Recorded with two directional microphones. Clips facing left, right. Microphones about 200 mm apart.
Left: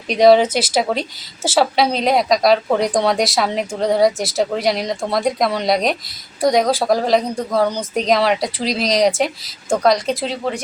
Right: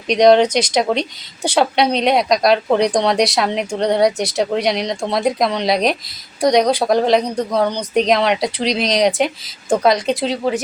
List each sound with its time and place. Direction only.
0.1 s a woman's voice: 5° left (ahead or behind)